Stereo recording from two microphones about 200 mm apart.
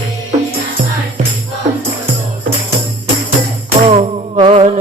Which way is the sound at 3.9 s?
30° right (ahead or behind).